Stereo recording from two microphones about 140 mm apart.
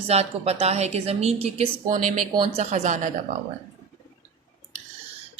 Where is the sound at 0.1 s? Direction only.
50° right (ahead or behind).